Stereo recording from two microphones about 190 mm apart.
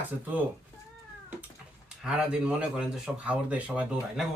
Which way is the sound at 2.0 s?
5° right (ahead or behind).